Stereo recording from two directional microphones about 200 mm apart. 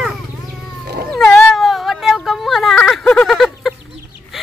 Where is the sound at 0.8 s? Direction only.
50° right (ahead or behind).